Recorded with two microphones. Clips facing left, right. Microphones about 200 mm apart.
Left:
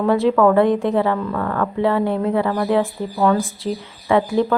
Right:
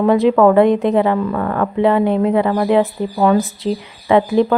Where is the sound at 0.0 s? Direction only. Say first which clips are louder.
Right 3 dB; 15° right (ahead or behind).